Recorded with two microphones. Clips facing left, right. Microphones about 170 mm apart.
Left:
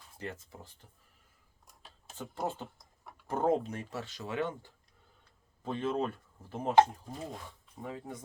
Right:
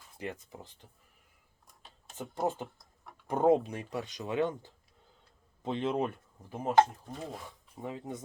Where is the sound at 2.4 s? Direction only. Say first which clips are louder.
Right 5 dB; 20° right (ahead or behind).